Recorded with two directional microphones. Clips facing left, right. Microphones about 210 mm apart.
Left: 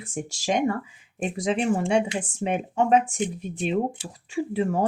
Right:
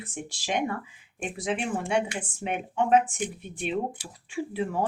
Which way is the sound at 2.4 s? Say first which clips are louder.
Left 4 dB; 40° left (ahead or behind).